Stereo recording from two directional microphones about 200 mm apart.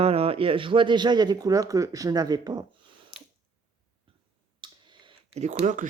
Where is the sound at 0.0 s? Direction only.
30° right (ahead or behind).